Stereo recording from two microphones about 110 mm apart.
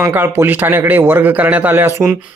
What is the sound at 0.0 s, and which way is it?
A man's voice, 20° right (ahead or behind).